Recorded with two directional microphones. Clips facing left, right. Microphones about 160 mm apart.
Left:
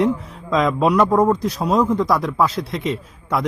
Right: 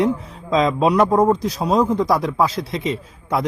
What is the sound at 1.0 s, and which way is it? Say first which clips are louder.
Speech: right 1 dB; 15° right (ahead or behind).